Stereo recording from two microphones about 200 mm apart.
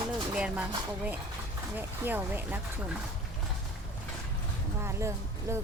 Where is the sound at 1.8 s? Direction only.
10° right (ahead or behind).